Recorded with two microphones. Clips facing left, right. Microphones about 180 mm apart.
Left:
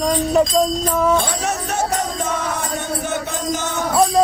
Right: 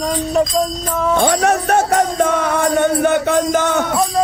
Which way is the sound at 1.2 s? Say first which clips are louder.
Right 8 dB; 60° right (ahead or behind).